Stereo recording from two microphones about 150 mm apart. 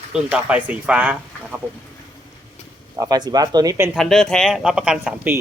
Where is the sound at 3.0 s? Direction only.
25° right (ahead or behind).